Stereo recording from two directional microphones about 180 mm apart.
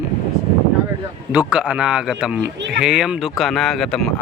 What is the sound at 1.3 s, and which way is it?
A man's voice, 5° right (ahead or behind).